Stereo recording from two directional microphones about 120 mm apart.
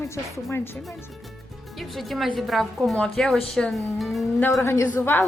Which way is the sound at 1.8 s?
Centre (ahead or behind).